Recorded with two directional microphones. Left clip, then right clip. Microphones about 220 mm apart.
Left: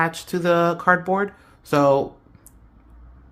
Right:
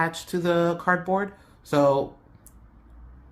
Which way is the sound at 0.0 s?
25° left (ahead or behind).